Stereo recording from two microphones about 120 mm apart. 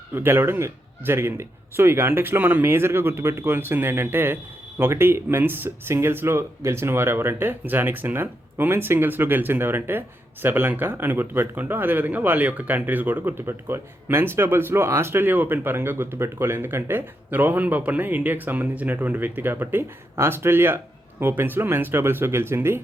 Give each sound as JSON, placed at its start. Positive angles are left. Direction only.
{"t": 0.1, "sound": "speech", "side_deg": -20}